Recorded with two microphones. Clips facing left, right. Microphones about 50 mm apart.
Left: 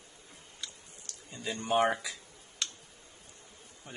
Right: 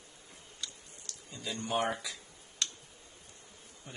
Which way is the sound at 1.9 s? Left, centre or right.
Centre.